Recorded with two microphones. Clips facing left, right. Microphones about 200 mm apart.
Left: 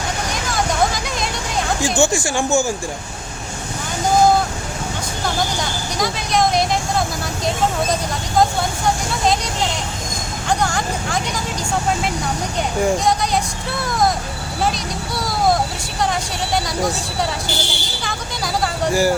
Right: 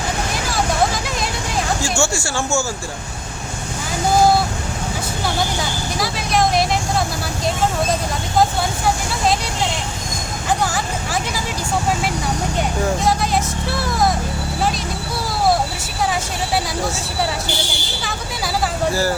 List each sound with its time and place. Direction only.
0.5 s vehicle: centre (ahead or behind)
1.8 s speech: 15° left (ahead or behind)
6.0 s speech: centre (ahead or behind)
10.6 s speech: 5° right (ahead or behind)
13.1 s speech: 5° right (ahead or behind)
18.0 s speech: 5° right (ahead or behind)